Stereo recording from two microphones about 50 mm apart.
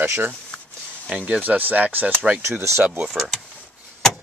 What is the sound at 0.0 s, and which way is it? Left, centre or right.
Speech, right.